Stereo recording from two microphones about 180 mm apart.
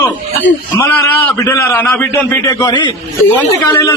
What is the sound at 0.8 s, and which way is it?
A man's voice, 10° left (ahead or behind).